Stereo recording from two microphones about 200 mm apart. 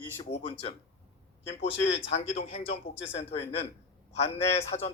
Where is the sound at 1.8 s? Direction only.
65° left (ahead or behind).